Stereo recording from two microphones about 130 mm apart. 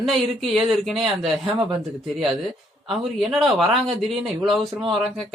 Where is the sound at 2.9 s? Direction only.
Centre (ahead or behind).